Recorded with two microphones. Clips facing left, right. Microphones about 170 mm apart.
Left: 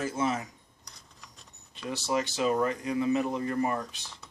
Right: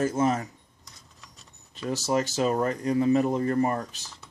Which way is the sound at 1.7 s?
40° right (ahead or behind).